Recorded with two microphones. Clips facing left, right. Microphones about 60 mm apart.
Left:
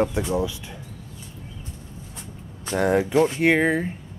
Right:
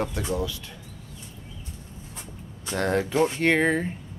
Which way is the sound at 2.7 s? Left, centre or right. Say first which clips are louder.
Left 4 dB; centre.